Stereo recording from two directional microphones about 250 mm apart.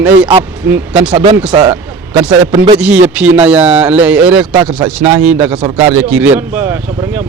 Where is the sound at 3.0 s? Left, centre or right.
Centre.